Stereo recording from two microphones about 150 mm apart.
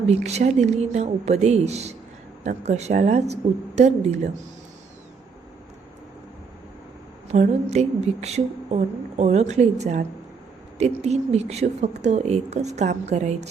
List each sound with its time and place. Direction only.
0.1 s speech: 45° right (ahead or behind)
7.3 s speech: 45° right (ahead or behind)